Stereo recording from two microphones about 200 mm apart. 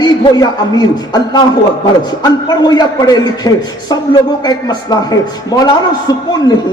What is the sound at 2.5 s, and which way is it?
A man's voice, 20° left (ahead or behind).